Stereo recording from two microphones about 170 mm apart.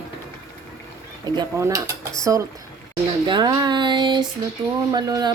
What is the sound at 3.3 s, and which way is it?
A woman's voice, 25° right (ahead or behind).